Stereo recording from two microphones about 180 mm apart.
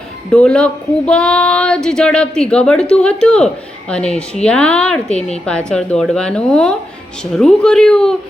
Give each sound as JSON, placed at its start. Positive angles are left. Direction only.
{"t": 0.3, "sound": "female singing", "side_deg": 5}